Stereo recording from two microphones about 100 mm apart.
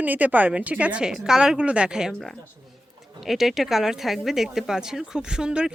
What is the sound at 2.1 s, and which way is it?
Speech, centre (ahead or behind).